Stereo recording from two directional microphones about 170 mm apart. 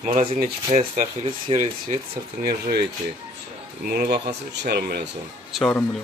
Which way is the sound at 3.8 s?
65° right (ahead or behind).